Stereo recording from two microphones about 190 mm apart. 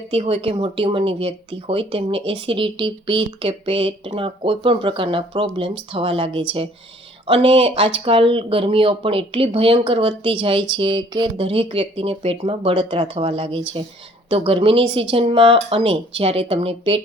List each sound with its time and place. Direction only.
0.1 s speech: 30° right (ahead or behind)